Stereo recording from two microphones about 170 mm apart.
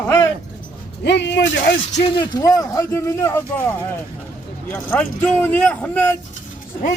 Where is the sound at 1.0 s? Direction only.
90° left.